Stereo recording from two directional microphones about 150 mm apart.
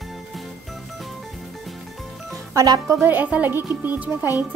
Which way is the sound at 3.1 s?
10° right (ahead or behind).